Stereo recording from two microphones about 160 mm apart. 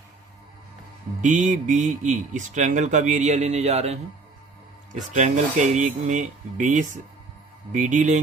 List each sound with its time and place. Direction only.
1.2 s speech: 50° right (ahead or behind)